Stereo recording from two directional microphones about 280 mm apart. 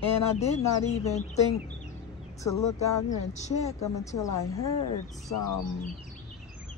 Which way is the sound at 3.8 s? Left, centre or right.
Centre.